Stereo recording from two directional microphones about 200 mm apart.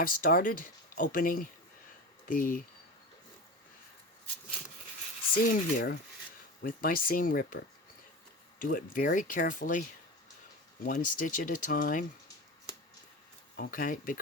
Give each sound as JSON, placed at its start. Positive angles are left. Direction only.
{"t": 0.0, "sound": "speech", "side_deg": 45}
{"t": 5.3, "sound": "speech", "side_deg": 45}
{"t": 8.6, "sound": "speech", "side_deg": 45}
{"t": 10.8, "sound": "speech", "side_deg": 40}
{"t": 13.6, "sound": "speech", "side_deg": 45}